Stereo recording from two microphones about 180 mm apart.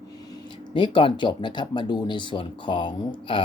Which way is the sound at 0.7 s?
30° left (ahead or behind).